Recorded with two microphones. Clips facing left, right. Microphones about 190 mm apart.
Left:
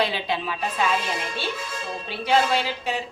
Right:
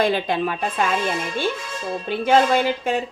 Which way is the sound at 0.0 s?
50° right (ahead or behind).